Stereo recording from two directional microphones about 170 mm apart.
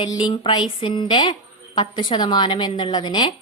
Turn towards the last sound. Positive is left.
turn(degrees=25)  # may be behind; listen again after turning